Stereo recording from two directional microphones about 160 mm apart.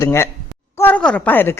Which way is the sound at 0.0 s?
15° left (ahead or behind).